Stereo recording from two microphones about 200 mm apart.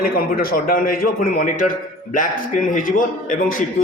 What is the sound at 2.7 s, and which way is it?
Speech, 40° left (ahead or behind).